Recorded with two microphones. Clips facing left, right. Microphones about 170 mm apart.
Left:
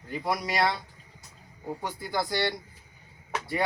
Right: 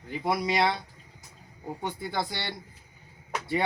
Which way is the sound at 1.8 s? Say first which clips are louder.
Even; 25° right (ahead or behind).